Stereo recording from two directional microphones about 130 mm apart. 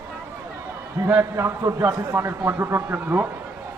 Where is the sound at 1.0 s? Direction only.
20° right (ahead or behind).